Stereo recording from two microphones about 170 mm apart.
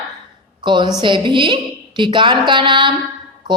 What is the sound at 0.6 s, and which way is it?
A woman's voice, 25° right (ahead or behind).